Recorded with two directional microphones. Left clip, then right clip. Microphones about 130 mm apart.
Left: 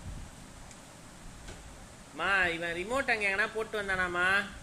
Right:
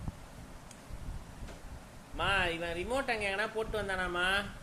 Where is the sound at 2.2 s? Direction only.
15° left (ahead or behind).